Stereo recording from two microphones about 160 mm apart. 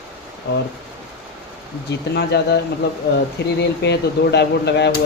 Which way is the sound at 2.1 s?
90° left.